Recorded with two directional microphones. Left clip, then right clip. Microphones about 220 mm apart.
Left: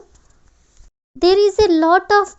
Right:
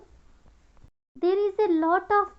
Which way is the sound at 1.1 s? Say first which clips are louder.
Left 11 dB; 40° left (ahead or behind).